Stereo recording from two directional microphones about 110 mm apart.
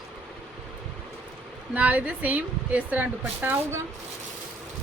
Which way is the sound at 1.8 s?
15° right (ahead or behind).